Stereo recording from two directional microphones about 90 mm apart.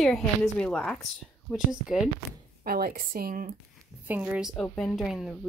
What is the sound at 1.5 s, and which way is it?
Speech, 5° right (ahead or behind).